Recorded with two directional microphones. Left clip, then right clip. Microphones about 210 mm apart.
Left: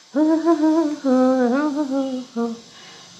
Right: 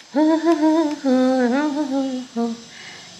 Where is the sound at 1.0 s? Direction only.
10° left (ahead or behind).